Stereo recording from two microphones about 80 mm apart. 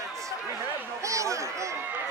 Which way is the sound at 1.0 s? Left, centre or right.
Right.